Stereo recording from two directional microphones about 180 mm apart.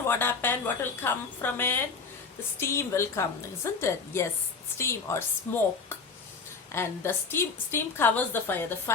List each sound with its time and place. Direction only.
0.1 s a woman's voice: 10° left (ahead or behind)